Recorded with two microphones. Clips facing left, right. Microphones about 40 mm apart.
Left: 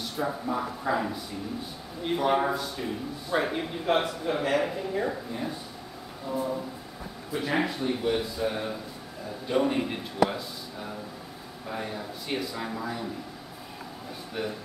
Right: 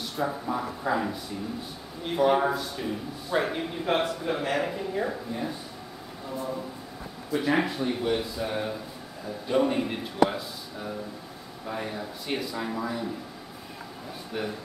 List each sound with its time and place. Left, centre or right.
0.0 s a man's voice: centre
7.3 s a man's voice: centre